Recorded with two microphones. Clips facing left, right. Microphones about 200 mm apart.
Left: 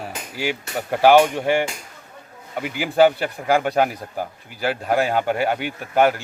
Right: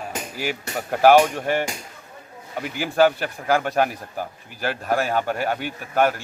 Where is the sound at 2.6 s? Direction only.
15° left (ahead or behind).